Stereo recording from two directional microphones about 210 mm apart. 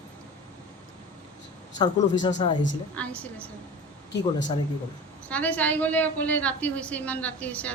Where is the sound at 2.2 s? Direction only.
20° left (ahead or behind).